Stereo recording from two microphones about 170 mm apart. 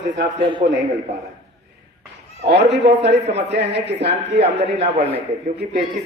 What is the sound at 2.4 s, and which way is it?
A woman's voice, 85° right.